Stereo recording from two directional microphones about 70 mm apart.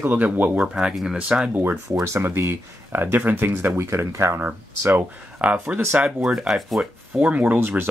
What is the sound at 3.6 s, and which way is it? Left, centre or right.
Speech, right.